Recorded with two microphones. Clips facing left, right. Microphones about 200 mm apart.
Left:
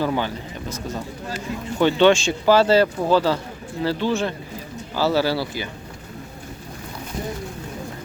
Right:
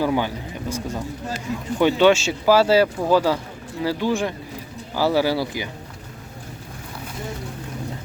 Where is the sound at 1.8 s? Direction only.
10° right (ahead or behind).